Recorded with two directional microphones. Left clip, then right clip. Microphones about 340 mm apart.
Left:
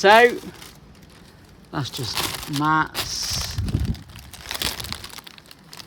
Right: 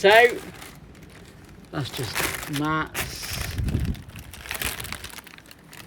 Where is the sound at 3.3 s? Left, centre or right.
Left.